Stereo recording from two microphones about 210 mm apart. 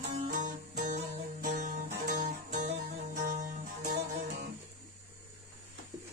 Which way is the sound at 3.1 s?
35° right (ahead or behind).